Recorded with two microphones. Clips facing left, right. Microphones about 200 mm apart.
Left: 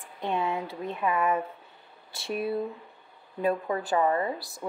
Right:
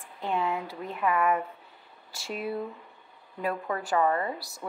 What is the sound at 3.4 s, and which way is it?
Speech, 25° left (ahead or behind).